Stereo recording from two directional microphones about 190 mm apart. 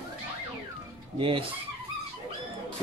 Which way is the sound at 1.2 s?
25° right (ahead or behind).